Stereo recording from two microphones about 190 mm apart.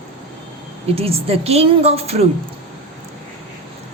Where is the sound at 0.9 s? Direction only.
30° right (ahead or behind).